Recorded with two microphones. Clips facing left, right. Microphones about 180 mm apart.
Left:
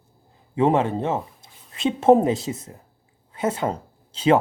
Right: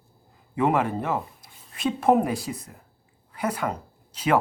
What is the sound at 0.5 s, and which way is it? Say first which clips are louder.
A woman's voice: left 3 dB; 25° left (ahead or behind).